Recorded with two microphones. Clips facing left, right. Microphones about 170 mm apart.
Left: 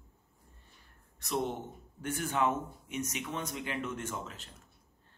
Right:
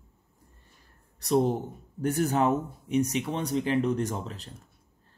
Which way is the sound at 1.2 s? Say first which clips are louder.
Right 10 dB; 35° right (ahead or behind).